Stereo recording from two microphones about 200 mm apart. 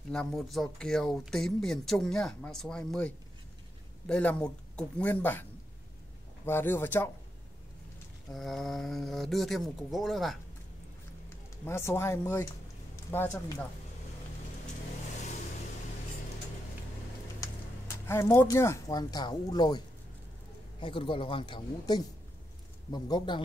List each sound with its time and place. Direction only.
0.1 s speech: 5° left (ahead or behind)
4.1 s speech: 5° left (ahead or behind)
8.3 s speech: centre (ahead or behind)
11.2 s speech: 15° left (ahead or behind)
17.4 s speech: 10° left (ahead or behind)
20.8 s speech: 25° left (ahead or behind)